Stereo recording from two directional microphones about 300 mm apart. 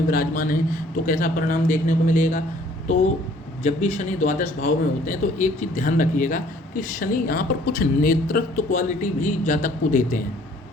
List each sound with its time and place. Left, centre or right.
0.1 s speech: left
3.6 s speech: left